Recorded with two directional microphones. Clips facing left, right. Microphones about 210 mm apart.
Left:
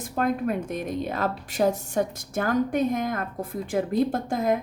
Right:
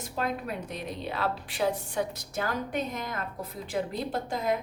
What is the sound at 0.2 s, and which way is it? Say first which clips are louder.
Speech: left 7 dB; 50° left (ahead or behind).